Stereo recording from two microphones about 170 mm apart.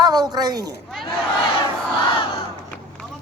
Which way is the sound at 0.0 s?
25° right (ahead or behind).